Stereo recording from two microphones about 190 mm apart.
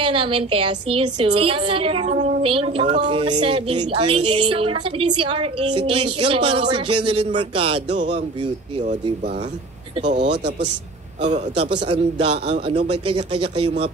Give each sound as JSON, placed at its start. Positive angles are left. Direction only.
{"t": 0.0, "sound": "a woman's voice", "side_deg": -25}
{"t": 10.1, "sound": "speech", "side_deg": -65}
{"t": 11.1, "sound": "a man's voice", "side_deg": -35}